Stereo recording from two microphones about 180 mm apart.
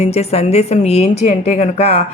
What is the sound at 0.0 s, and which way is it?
Speech, 35° left (ahead or behind).